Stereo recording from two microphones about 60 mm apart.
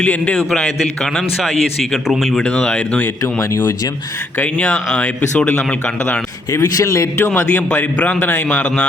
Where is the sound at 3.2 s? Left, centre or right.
Left.